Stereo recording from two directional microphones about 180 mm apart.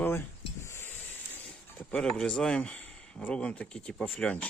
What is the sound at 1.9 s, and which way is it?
Speech, 5° left (ahead or behind).